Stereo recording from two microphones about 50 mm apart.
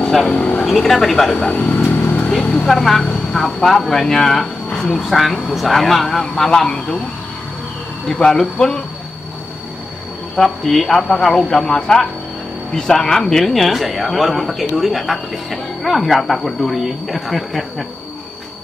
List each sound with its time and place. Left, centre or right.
0.7 s speech: centre
1.5 s speech: left
1.9 s vehicle: left
2.6 s speech: centre
8.1 s speech: centre
10.3 s speech: centre